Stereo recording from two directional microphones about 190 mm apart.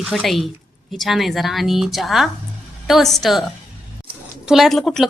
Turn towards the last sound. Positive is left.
turn(degrees=0)  # may be behind; listen again after turning